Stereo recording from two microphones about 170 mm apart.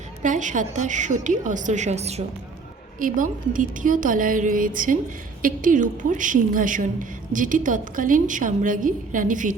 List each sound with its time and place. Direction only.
0.2 s a woman's voice: 45° right (ahead or behind)
3.0 s a woman's voice: 50° right (ahead or behind)